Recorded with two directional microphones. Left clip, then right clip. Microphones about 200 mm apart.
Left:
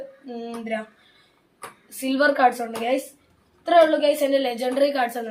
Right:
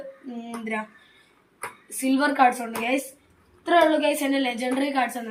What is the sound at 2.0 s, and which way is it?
Speech, 15° left (ahead or behind).